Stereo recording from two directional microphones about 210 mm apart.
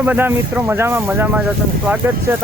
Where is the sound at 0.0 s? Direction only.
10° right (ahead or behind).